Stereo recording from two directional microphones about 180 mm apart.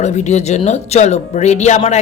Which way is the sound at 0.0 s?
40° left (ahead or behind).